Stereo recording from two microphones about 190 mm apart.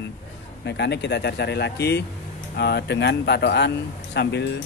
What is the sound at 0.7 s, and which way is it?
Speech, 65° left (ahead or behind).